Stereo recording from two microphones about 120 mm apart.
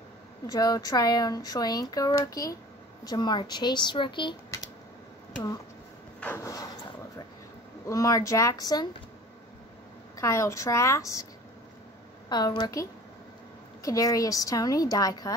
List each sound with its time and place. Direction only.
0.5 s speech: 30° left (ahead or behind)
6.2 s a sound: 25° left (ahead or behind)
7.8 s a woman's voice: 30° left (ahead or behind)
10.1 s a woman's voice: 25° left (ahead or behind)
12.3 s speech: 35° left (ahead or behind)
13.8 s a woman's voice: 30° left (ahead or behind)